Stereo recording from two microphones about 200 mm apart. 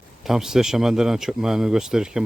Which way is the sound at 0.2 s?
Centre (ahead or behind).